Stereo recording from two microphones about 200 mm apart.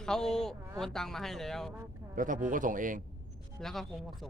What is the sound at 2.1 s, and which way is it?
Speech, 40° right (ahead or behind).